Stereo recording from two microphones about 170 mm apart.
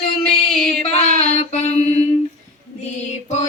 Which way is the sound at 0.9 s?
45° left (ahead or behind).